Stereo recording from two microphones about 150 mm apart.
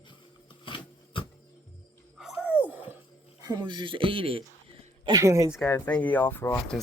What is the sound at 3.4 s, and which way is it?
Speech, 30° right (ahead or behind).